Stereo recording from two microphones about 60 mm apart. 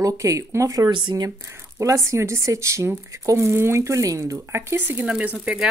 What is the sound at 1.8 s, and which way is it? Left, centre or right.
Speech, right.